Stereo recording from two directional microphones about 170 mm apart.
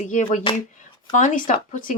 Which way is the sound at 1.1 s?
50° left (ahead or behind).